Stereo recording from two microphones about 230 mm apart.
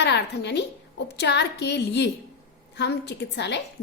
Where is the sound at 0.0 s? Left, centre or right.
Left.